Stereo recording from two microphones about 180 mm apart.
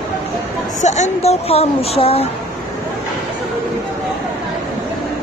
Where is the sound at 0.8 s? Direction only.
40° left (ahead or behind).